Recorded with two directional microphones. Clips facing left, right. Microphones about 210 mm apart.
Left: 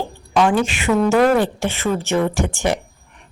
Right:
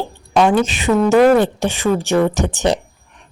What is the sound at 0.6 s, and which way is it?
A woman's voice, 20° right (ahead or behind).